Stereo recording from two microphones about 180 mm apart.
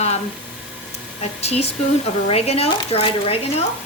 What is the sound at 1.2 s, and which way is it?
Speech, 35° left (ahead or behind).